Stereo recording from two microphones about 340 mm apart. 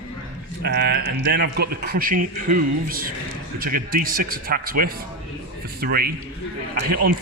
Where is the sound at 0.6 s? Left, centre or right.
Right.